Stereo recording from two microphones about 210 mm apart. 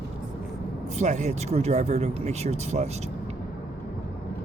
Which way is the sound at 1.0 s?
35° right (ahead or behind).